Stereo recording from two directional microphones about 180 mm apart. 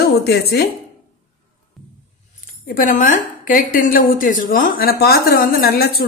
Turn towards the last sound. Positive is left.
turn(degrees=55)  # may be behind; listen again after turning